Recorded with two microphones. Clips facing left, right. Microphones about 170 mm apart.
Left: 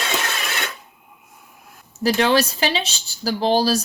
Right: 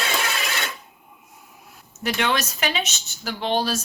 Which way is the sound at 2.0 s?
35° left (ahead or behind).